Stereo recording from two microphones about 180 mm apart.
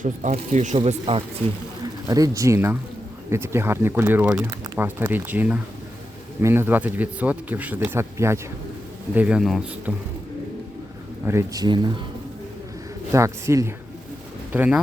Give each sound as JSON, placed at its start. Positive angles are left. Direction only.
{"t": 0.0, "sound": "speech", "side_deg": -40}
{"t": 2.0, "sound": "a man's voice", "side_deg": -20}
{"t": 11.3, "sound": "speech", "side_deg": -15}
{"t": 13.1, "sound": "speech", "side_deg": -15}